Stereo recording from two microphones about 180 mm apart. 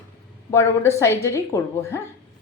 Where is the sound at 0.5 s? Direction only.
15° left (ahead or behind).